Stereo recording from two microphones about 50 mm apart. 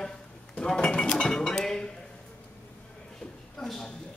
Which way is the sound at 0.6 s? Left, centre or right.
Centre.